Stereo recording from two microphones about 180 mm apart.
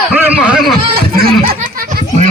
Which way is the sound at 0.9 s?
55° right (ahead or behind).